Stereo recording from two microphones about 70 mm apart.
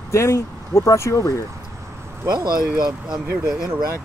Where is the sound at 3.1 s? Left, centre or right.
Centre.